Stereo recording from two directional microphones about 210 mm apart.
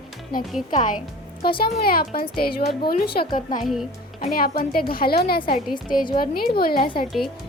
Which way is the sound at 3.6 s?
Centre (ahead or behind).